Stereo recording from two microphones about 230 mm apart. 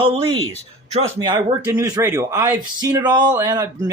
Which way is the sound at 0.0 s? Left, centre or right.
Right.